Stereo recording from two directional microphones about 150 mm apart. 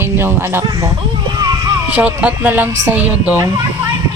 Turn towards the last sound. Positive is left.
turn(degrees=-10)  # may be behind; listen again after turning